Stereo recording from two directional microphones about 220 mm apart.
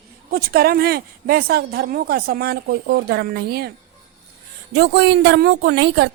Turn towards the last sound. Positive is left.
turn(degrees=-50)  # may be behind; listen again after turning